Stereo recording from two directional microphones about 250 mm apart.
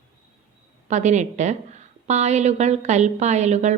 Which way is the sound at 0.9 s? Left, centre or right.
Right.